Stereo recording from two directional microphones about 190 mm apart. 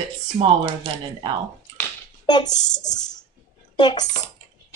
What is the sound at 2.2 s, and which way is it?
A woman's voice, 20° left (ahead or behind).